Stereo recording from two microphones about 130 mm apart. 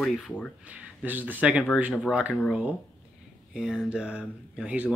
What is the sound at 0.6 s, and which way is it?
Speech, 10° right (ahead or behind).